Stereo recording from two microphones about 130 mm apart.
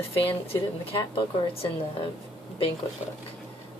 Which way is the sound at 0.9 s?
45° left (ahead or behind).